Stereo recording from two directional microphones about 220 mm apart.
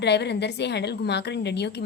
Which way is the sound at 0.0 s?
50° left (ahead or behind).